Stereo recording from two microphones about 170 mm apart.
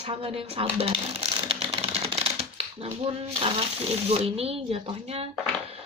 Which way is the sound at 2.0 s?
35° right (ahead or behind).